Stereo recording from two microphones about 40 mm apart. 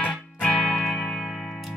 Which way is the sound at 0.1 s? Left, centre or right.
Left.